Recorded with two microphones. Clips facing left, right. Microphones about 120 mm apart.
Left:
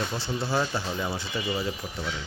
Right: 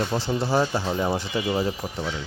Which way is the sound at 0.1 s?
40° right (ahead or behind).